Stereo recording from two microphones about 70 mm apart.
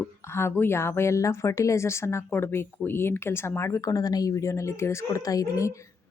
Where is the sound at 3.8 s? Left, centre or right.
Left.